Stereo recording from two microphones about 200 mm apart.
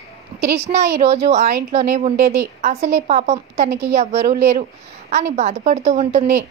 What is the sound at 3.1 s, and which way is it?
A woman's voice, 35° right (ahead or behind).